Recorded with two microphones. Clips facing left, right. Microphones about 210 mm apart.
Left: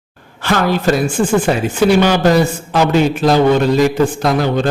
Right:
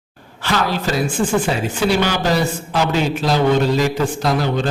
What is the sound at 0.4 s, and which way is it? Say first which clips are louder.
Speech: left 6 dB; 50° left (ahead or behind).